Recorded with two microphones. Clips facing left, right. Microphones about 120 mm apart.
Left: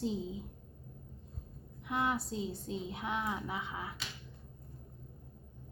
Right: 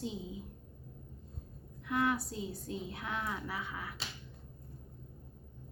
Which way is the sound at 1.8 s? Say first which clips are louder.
Right 1 dB; 20° left (ahead or behind).